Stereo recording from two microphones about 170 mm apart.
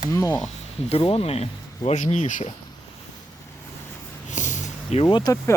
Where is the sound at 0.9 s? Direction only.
35° left (ahead or behind).